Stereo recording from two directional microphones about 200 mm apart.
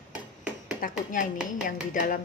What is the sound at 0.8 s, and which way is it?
Speech, 40° left (ahead or behind).